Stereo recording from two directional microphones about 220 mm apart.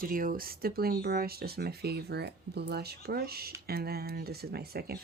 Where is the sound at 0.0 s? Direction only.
40° right (ahead or behind).